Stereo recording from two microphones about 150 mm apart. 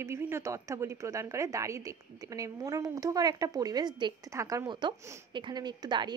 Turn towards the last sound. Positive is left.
turn(degrees=-30)  # may be behind; listen again after turning